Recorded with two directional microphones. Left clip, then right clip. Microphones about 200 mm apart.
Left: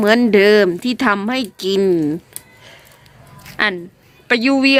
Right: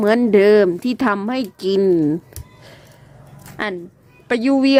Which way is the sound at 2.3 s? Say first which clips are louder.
Left 2 dB; 30° right (ahead or behind).